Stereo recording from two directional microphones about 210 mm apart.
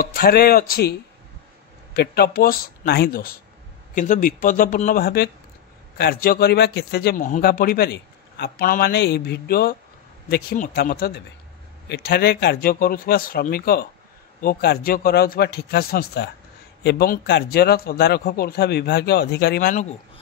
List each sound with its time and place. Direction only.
0.0 s a man's voice: 45° left (ahead or behind)
2.0 s a man's voice: 50° left (ahead or behind)
19.7 s speech: 35° left (ahead or behind)